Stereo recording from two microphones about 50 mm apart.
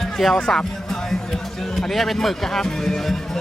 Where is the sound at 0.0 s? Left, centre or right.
Centre.